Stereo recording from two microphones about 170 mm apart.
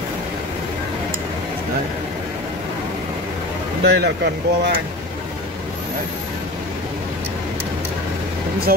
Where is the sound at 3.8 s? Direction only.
75° right (ahead or behind).